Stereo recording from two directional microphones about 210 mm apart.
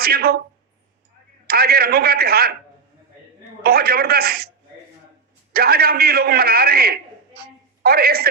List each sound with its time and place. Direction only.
0.0 s a man's voice: 45° right (ahead or behind)
1.5 s a man's voice: 45° right (ahead or behind)
3.6 s a man's voice: 45° right (ahead or behind)
5.5 s a man's voice: 45° right (ahead or behind)